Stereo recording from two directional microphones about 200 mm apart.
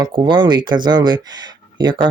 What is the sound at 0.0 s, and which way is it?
Speech, 20° right (ahead or behind).